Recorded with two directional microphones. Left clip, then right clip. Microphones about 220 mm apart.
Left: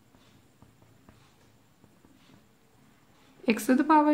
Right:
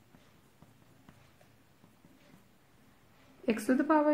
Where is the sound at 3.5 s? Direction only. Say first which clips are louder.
Left 5 dB; 20° left (ahead or behind).